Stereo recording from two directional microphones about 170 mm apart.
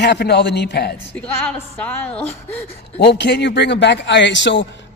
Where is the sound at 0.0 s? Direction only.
80° left.